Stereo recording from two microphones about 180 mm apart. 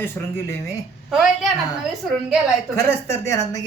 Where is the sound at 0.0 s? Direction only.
15° left (ahead or behind).